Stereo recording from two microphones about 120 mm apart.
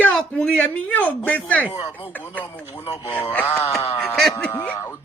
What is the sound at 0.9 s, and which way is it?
Speech, 15° left (ahead or behind).